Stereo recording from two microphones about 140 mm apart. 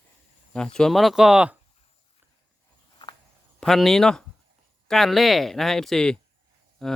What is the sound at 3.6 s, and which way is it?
Speech, centre (ahead or behind).